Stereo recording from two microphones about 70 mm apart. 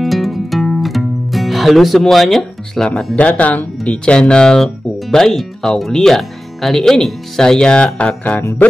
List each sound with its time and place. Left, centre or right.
0.0 s music: centre
3.2 s speech: left